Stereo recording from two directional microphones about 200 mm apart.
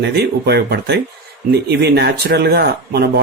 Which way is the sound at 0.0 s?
55° right (ahead or behind).